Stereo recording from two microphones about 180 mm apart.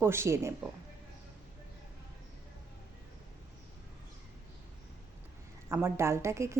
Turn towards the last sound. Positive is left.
turn(degrees=-15)  # may be behind; listen again after turning